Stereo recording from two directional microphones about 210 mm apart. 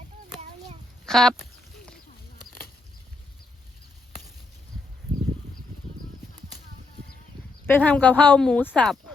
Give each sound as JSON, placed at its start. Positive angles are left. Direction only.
{"t": 1.0, "sound": "sheep", "side_deg": 5}
{"t": 7.7, "sound": "speech", "side_deg": 5}